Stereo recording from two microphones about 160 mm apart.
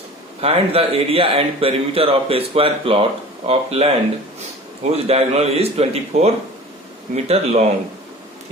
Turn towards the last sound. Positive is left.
turn(degrees=-45)  # may be behind; listen again after turning